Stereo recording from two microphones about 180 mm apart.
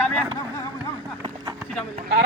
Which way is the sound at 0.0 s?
5° left (ahead or behind).